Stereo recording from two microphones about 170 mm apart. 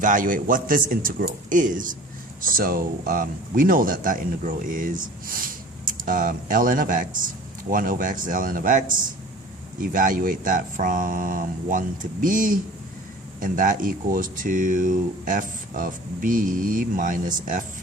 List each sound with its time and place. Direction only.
0.0 s speech: 50° right (ahead or behind)